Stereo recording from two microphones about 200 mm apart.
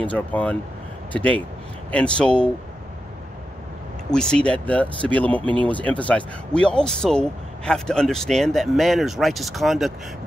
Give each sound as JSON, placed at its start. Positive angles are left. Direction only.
{"t": 0.0, "sound": "speech", "side_deg": 5}
{"t": 4.1, "sound": "speech", "side_deg": 5}